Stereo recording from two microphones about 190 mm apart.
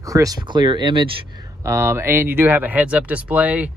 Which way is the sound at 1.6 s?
15° right (ahead or behind).